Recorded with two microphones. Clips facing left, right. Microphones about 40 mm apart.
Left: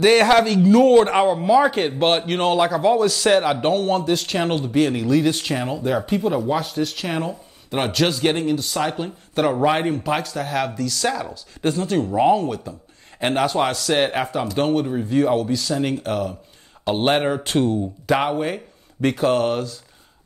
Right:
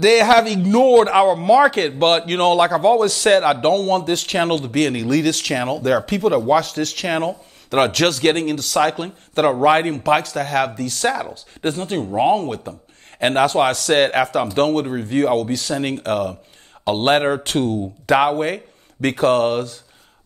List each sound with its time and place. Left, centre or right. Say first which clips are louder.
0.0 s a man's voice: right 2 dB; right
5.8 s a man's voice: right 3 dB; right
12.0 s speech: right 1 dB; centre
12.3 s a man's voice: even; right